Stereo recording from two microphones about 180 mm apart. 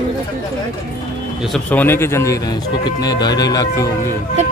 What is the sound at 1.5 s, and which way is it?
Speech, 10° left (ahead or behind).